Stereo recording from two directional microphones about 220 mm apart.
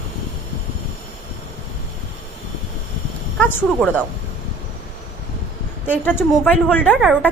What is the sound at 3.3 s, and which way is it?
Speech, 5° left (ahead or behind).